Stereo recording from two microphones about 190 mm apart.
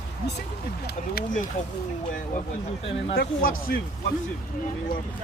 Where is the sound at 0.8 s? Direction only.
55° left (ahead or behind).